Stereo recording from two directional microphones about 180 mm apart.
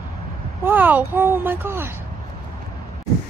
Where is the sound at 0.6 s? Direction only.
10° right (ahead or behind).